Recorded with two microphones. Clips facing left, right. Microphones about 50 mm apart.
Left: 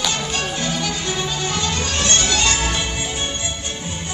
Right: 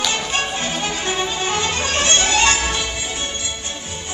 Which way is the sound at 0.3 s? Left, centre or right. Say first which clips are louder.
Right 1 dB; right.